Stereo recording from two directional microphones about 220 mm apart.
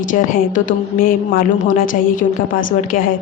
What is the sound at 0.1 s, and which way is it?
A woman's voice, 40° left (ahead or behind).